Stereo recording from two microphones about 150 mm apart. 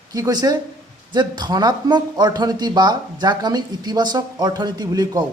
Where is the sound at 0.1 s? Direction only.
25° right (ahead or behind).